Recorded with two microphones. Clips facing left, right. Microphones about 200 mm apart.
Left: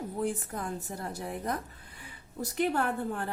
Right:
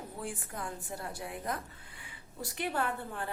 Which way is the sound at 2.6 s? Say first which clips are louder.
Left 5 dB; 45° left (ahead or behind).